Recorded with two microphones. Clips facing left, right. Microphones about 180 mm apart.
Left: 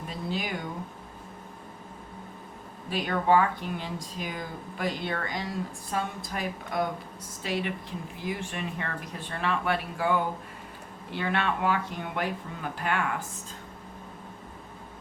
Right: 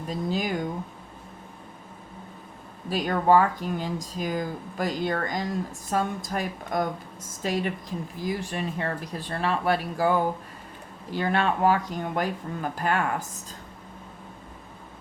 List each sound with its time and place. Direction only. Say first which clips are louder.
0.3 s a woman's voice: right 4 dB; 40° right (ahead or behind)
2.9 s a woman's voice: right 3 dB; 40° right (ahead or behind)